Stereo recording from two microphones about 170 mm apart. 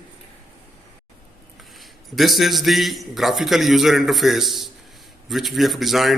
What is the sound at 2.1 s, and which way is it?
A man's voice, centre (ahead or behind).